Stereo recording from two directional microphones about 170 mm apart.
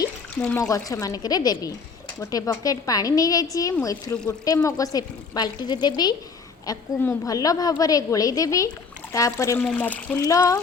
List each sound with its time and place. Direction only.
0.4 s a woman's voice: 20° left (ahead or behind)
10.2 s a woman's voice: 20° left (ahead or behind)